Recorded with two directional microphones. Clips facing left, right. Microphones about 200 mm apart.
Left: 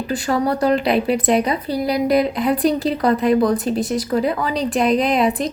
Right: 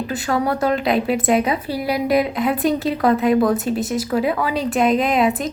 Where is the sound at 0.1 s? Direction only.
Centre (ahead or behind).